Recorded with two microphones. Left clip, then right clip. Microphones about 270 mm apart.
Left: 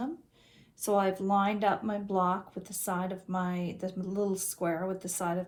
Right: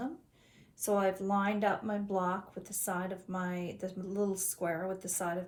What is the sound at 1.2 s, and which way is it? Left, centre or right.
A woman's voice, centre.